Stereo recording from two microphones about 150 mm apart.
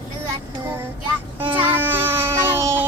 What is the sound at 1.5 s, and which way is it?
Speech, 35° right (ahead or behind).